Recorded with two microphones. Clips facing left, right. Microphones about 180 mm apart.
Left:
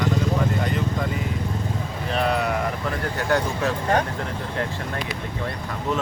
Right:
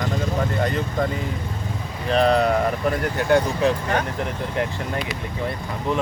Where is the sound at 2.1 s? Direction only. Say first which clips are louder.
Right 6 dB; 35° right (ahead or behind).